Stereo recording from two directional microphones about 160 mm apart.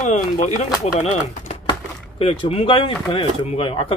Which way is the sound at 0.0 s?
45° left (ahead or behind).